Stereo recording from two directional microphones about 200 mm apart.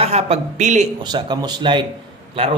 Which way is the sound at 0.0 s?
30° right (ahead or behind).